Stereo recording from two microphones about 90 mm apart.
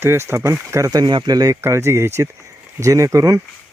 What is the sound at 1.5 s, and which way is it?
Speech, 35° right (ahead or behind).